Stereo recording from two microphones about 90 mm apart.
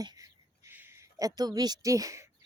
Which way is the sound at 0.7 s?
25° right (ahead or behind).